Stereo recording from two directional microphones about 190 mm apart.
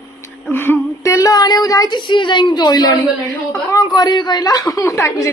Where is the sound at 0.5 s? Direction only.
10° left (ahead or behind).